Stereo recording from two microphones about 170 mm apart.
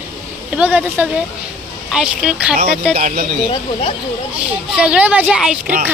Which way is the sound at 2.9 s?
55° right (ahead or behind).